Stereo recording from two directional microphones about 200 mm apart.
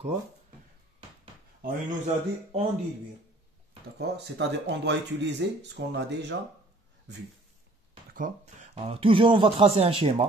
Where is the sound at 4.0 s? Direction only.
60° right (ahead or behind).